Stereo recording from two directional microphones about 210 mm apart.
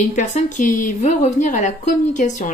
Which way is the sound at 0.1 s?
35° left (ahead or behind).